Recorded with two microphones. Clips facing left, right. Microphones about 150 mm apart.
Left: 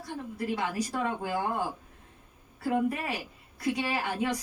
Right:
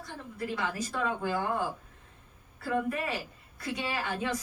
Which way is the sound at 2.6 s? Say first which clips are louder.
Left 2 dB; 15° left (ahead or behind).